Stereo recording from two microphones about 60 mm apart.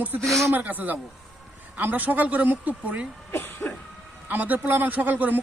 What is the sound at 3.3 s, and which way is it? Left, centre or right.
Cough, left.